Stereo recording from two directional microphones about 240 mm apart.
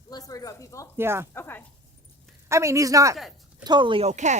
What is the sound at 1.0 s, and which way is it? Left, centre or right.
Speech, centre.